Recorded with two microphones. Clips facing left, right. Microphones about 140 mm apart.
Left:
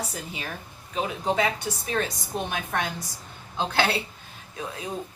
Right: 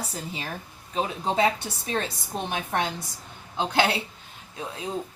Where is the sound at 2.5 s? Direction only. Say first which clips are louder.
Right 5 dB; 25° right (ahead or behind).